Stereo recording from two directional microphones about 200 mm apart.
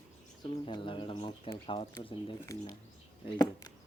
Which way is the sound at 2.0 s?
25° left (ahead or behind).